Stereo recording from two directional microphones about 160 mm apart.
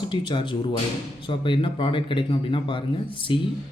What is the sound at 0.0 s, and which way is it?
Speech, 30° left (ahead or behind).